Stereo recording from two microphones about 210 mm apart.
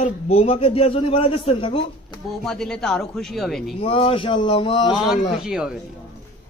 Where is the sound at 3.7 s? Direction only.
25° left (ahead or behind).